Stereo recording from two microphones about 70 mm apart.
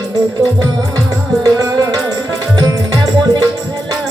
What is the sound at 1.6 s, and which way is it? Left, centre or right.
Music, right.